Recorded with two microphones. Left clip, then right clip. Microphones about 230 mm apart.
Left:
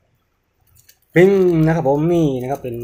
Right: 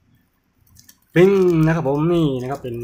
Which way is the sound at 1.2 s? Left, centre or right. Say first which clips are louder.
Left 2 dB; centre.